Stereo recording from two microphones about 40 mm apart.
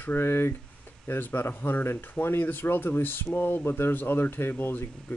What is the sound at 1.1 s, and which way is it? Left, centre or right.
Speech, left.